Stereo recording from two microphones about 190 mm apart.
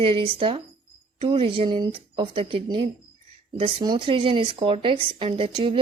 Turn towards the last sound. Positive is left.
turn(degrees=-30)  # may be behind; listen again after turning